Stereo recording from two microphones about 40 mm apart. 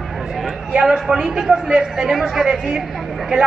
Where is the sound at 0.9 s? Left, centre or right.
Centre.